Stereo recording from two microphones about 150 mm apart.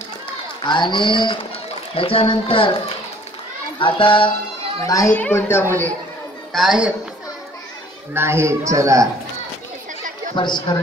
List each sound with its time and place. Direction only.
0.7 s speech: 30° left (ahead or behind)
3.8 s speech: 35° left (ahead or behind)
4.8 s speech: 20° left (ahead or behind)
6.5 s a woman's voice: 5° right (ahead or behind)
8.1 s speech: 15° right (ahead or behind)
10.3 s speech: 30° left (ahead or behind)